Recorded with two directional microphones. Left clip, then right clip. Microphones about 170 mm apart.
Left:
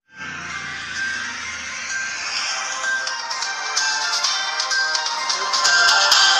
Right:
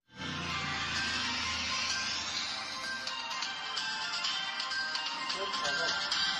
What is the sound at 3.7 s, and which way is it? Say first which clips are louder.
Music: left 17 dB; 50° left (ahead or behind).